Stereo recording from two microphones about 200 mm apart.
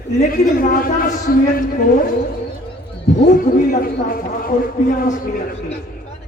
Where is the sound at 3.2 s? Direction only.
45° left (ahead or behind).